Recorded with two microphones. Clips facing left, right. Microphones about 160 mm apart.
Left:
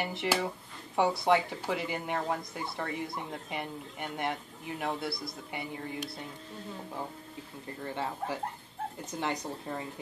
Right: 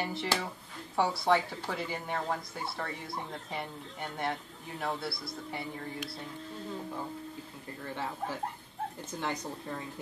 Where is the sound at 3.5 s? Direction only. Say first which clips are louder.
Left 1 dB; 15° left (ahead or behind).